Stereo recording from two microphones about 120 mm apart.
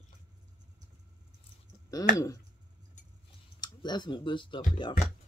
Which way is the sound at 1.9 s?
30° left (ahead or behind).